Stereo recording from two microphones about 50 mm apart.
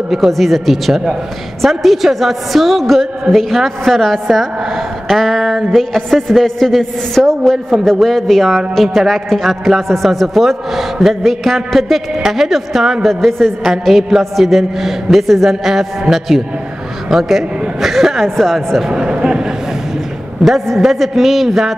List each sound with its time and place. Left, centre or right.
0.1 s a man's voice: centre
13.1 s a man's voice: centre
18.9 s a sound: centre
20.4 s a man's voice: centre